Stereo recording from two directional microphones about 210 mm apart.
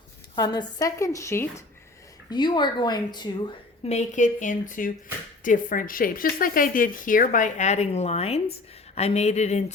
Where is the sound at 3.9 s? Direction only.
35° left (ahead or behind).